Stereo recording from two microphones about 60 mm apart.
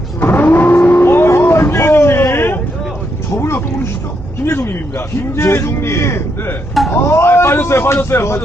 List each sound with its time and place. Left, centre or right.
0.2 s vehicle: left
4.4 s a sound: left
6.9 s speech: left